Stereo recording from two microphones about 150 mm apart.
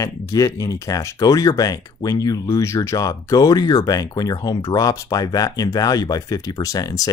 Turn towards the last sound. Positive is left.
turn(degrees=25)  # may be behind; listen again after turning